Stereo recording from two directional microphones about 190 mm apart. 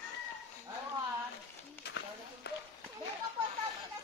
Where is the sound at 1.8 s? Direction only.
60° left (ahead or behind).